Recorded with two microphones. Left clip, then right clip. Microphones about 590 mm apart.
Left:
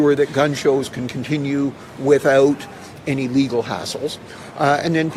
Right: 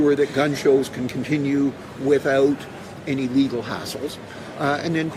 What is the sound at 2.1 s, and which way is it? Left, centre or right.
A man's voice, left.